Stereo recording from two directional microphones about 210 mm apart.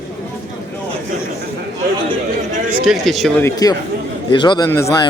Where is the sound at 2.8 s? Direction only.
Centre (ahead or behind).